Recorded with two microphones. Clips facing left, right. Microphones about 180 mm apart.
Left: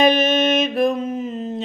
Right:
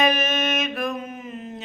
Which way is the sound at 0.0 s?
30° left (ahead or behind).